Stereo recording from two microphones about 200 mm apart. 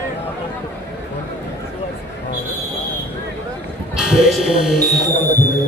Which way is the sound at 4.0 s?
Centre (ahead or behind).